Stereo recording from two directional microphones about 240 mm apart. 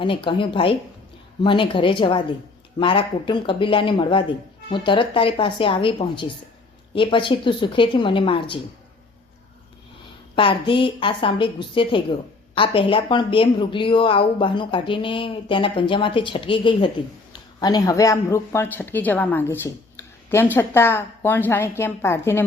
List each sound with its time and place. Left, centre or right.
0.0 s speech: left
10.3 s speech: left